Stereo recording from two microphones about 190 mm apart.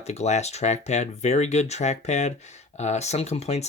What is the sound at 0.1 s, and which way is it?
Speech, 35° left (ahead or behind).